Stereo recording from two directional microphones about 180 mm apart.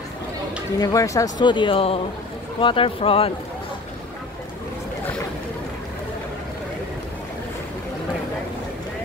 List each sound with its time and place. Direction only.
0.7 s speech: 20° left (ahead or behind)